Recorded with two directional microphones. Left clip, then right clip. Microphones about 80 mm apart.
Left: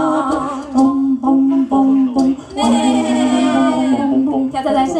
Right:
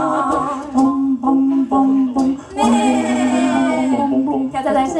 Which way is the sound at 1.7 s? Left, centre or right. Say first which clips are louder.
Left 1 dB; centre.